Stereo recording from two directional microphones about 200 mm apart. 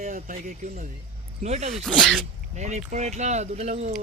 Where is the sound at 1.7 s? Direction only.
Centre (ahead or behind).